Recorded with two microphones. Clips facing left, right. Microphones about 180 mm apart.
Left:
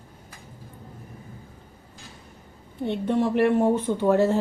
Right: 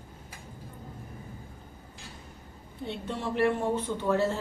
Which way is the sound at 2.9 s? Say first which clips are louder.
Left 10 dB; 60° left (ahead or behind).